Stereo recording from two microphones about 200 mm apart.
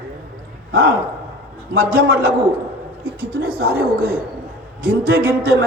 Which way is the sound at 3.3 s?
50° right (ahead or behind).